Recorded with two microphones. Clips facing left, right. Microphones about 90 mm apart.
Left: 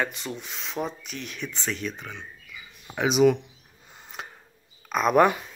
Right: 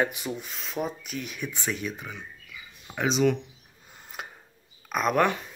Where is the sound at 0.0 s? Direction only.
10° right (ahead or behind).